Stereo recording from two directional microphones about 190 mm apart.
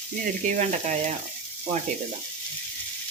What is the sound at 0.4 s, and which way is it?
Speech, 35° right (ahead or behind).